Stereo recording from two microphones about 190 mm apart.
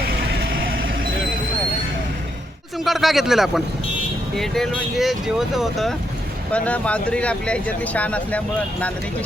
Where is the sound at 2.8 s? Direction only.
Centre (ahead or behind).